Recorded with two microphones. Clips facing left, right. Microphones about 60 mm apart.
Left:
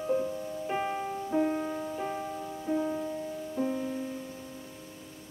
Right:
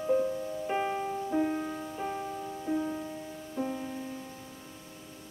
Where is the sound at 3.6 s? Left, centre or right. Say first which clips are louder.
Left 2 dB; centre.